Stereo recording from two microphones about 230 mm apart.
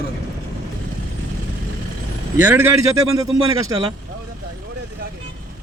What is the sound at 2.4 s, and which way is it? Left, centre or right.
Speech, centre.